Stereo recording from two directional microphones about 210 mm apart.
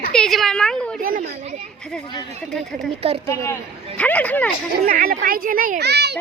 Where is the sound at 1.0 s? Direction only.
45° right (ahead or behind).